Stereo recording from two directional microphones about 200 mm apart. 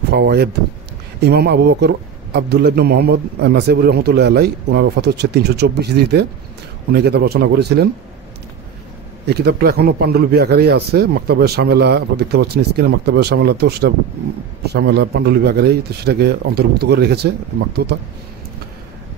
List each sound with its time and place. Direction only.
0.1 s a man's voice: 55° right (ahead or behind)
9.2 s a man's voice: 55° right (ahead or behind)